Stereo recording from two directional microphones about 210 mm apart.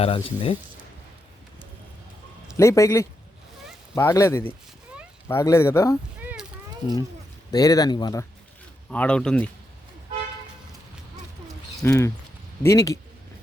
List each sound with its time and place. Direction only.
0.0 s speech: 25° left (ahead or behind)
2.6 s speech: 15° left (ahead or behind)
7.5 s speech: 15° left (ahead or behind)
8.9 s speech: 5° left (ahead or behind)
11.8 s speech: 15° left (ahead or behind)